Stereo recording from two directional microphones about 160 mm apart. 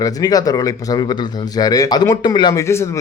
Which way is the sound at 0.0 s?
25° left (ahead or behind).